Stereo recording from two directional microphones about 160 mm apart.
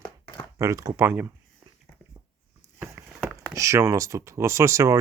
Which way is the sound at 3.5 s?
20° right (ahead or behind).